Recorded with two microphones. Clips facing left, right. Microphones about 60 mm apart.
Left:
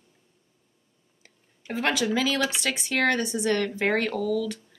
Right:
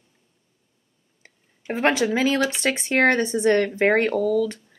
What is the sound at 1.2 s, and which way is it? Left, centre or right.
Speech, right.